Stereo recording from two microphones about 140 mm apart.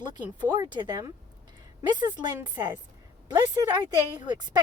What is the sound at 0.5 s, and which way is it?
Speech, 35° right (ahead or behind).